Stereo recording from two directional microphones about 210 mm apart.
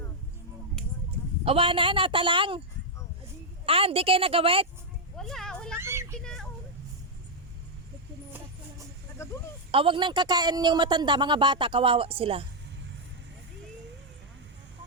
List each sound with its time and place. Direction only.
1.5 s speech: 25° right (ahead or behind)
3.7 s speech: 25° right (ahead or behind)
5.1 s children playing: centre (ahead or behind)
5.7 s children playing: 10° right (ahead or behind)
6.1 s a sound: 5° left (ahead or behind)
9.7 s speech: 25° right (ahead or behind)